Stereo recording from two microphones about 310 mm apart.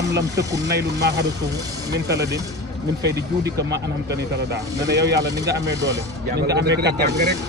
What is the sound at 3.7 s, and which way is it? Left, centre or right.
Speech, right.